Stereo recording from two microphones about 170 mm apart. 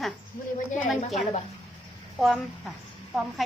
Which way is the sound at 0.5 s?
50° left (ahead or behind).